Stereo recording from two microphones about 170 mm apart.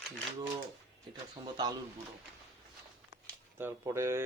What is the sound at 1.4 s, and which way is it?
Speech, 25° right (ahead or behind).